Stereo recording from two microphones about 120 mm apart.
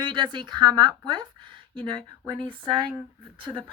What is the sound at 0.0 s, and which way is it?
A woman's voice, 40° right (ahead or behind).